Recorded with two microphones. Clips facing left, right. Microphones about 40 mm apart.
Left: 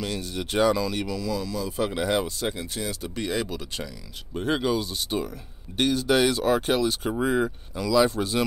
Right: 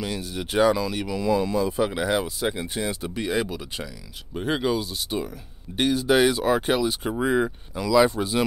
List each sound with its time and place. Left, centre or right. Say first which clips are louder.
0.0 s speech: right 1 dB; centre
1.1 s speech: right 6 dB; right
1.8 s speech: right 1 dB; centre